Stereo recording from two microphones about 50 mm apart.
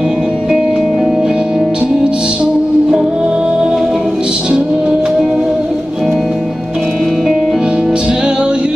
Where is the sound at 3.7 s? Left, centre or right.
Centre.